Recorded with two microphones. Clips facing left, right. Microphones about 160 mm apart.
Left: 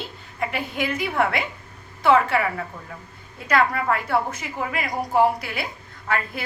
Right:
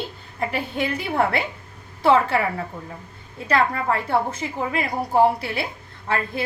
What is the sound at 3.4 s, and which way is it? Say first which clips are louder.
A woman's voice: even; 25° right (ahead or behind).